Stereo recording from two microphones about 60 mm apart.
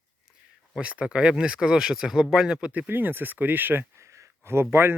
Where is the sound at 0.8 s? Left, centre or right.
Centre.